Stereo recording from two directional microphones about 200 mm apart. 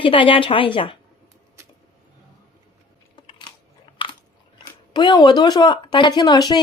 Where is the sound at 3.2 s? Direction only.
20° left (ahead or behind).